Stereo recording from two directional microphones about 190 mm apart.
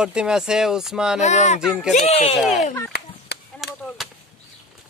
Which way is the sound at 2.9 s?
55° left (ahead or behind).